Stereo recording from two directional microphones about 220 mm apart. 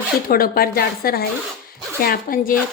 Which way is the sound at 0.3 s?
40° left (ahead or behind).